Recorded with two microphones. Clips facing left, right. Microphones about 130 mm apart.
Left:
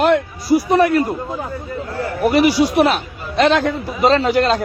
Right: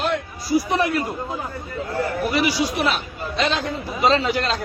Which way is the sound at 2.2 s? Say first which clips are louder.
Left 10 dB; 50° left (ahead or behind).